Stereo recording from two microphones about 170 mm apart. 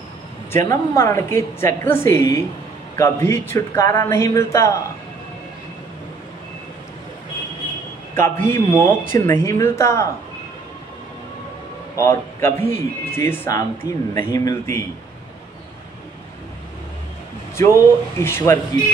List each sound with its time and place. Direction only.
0.5 s speech: 15° left (ahead or behind)
8.1 s speech: 15° left (ahead or behind)
12.0 s speech: 15° left (ahead or behind)
17.6 s speech: 20° left (ahead or behind)